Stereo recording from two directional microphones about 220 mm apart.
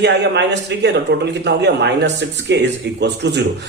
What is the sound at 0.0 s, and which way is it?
A man's voice, 50° right (ahead or behind).